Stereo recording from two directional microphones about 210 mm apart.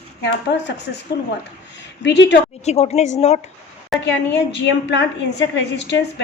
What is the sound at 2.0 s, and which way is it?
Speech, 55° left (ahead or behind).